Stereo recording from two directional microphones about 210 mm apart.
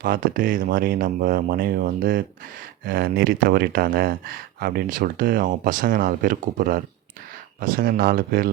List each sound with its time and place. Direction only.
0.0 s speech: 40° right (ahead or behind)